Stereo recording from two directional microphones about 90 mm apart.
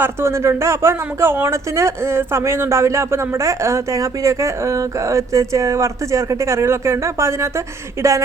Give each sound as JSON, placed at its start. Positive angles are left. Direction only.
{"t": 0.0, "sound": "speech", "side_deg": -30}